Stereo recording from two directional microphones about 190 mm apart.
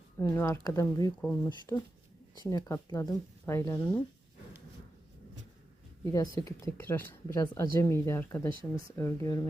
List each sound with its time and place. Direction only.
0.2 s speech: 15° left (ahead or behind)
6.1 s speech: 15° left (ahead or behind)